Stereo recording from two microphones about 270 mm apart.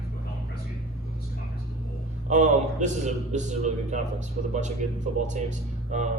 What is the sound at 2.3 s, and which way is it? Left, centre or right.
A man's voice, right.